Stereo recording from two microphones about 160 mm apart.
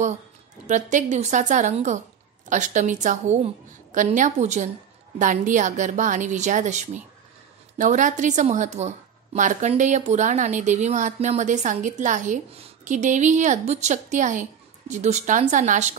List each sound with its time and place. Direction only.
0.7 s a woman's voice: 50° right (ahead or behind)